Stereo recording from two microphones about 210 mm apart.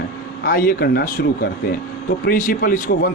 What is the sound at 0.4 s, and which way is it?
Speech, 45° left (ahead or behind).